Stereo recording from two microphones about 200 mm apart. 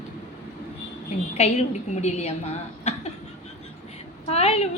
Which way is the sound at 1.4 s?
35° left (ahead or behind).